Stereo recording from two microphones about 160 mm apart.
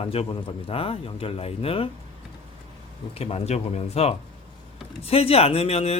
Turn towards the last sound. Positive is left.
turn(degrees=40)  # may be behind; listen again after turning